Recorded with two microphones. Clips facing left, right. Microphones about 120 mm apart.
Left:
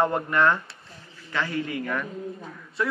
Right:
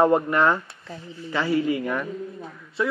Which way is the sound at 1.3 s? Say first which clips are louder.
Right 6 dB; 15° right (ahead or behind).